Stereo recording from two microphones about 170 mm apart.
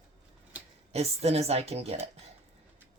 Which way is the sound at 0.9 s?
40° right (ahead or behind).